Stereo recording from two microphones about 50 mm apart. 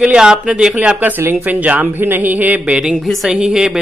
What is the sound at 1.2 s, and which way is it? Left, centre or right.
Speech, right.